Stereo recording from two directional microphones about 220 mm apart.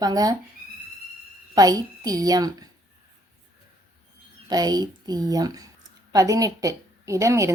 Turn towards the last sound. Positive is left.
turn(degrees=-15)  # may be behind; listen again after turning